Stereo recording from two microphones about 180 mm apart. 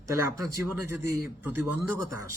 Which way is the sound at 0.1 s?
15° right (ahead or behind).